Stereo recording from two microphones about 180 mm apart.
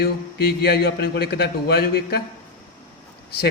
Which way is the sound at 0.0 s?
60° left (ahead or behind).